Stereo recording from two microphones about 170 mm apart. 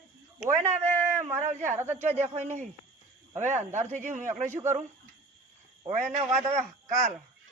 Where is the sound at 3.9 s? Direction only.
45° right (ahead or behind).